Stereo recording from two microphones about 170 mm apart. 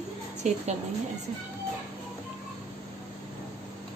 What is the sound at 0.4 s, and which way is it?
Speech, 45° right (ahead or behind).